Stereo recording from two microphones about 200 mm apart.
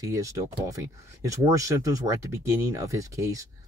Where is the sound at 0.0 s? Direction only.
15° right (ahead or behind).